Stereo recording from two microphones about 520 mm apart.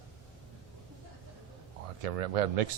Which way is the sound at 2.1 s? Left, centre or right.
Right.